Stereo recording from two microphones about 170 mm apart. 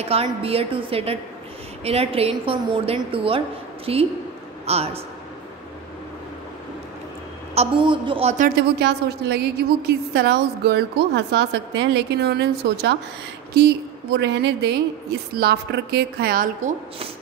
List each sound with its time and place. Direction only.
0.1 s a woman's voice: 35° right (ahead or behind)
7.5 s a woman's voice: 30° right (ahead or behind)
8.5 s a woman's voice: 75° right (ahead or behind)